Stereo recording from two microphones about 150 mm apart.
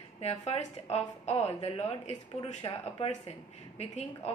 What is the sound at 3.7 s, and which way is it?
Speech, 45° left (ahead or behind).